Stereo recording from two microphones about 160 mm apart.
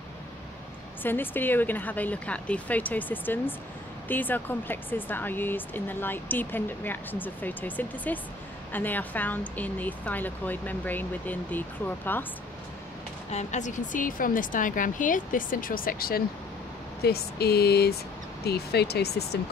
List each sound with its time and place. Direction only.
1.0 s speech: 10° left (ahead or behind)
13.3 s a woman's voice: 45° left (ahead or behind); by 16.3 s 70° left (ahead or behind)
17.0 s speech: 80° left